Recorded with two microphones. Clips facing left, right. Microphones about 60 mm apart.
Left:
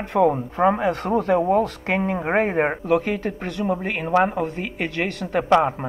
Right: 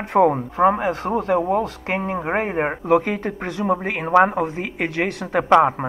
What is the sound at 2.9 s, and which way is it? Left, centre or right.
Speech, right.